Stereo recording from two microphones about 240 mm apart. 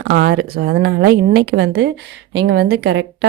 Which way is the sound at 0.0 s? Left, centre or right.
Right.